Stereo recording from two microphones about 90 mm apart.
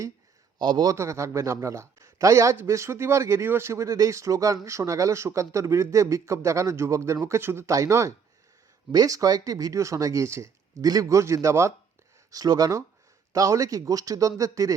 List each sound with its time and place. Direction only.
0.6 s a man's voice: 55° right (ahead or behind)
0.9 s speech: 30° right (ahead or behind)
12.3 s speech: 45° right (ahead or behind)